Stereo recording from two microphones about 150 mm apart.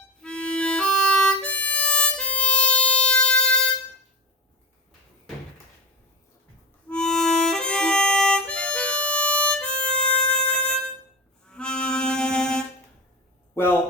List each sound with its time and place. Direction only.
0.2 s harmonica: 5° left (ahead or behind)
6.8 s harmonica: 5° left (ahead or behind)
11.4 s music: 5° left (ahead or behind)
13.5 s a sound: 15° left (ahead or behind)